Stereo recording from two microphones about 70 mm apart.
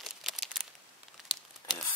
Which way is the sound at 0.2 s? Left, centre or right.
Centre.